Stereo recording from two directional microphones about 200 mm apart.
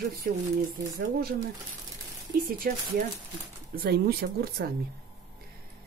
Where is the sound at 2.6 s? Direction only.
50° right (ahead or behind).